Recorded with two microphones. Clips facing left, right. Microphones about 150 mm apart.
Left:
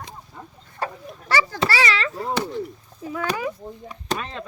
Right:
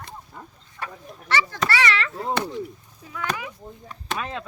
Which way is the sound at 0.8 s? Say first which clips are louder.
Left 6 dB; 35° left (ahead or behind).